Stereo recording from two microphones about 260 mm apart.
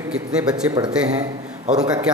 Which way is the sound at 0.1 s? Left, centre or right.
Centre.